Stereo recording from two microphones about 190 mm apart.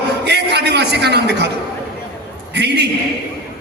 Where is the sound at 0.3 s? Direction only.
60° right (ahead or behind).